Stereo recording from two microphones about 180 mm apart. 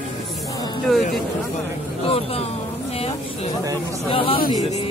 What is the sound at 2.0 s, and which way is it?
Speech, 30° left (ahead or behind).